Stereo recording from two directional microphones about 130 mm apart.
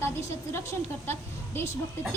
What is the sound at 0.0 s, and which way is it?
A woman's voice, 20° left (ahead or behind).